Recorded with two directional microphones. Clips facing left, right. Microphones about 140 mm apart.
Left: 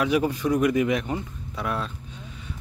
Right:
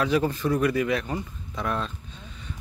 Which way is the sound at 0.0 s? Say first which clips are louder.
Left 1 dB; 10° left (ahead or behind).